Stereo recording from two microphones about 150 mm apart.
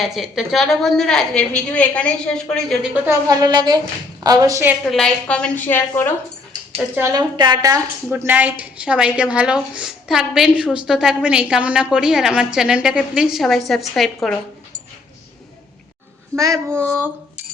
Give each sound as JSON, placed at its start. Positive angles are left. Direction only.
{"t": 0.0, "sound": "a woman's voice", "side_deg": 0}
{"t": 3.2, "sound": "a woman's voice", "side_deg": -25}
{"t": 4.9, "sound": "a woman's voice", "side_deg": 5}
{"t": 7.0, "sound": "a woman's voice", "side_deg": -25}
{"t": 16.3, "sound": "a woman's voice", "side_deg": -20}